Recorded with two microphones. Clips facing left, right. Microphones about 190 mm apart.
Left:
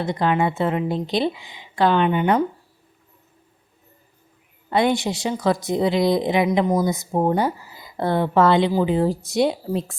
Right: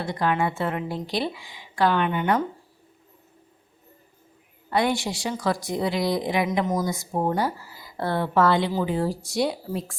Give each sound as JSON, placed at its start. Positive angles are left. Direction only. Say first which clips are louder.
{"t": 0.0, "sound": "a woman's voice", "louder": "left 4 dB", "side_deg": 20}
{"t": 4.7, "sound": "a woman's voice", "louder": "left 4 dB", "side_deg": 20}